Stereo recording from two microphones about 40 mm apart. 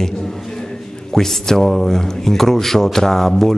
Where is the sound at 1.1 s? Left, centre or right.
Centre.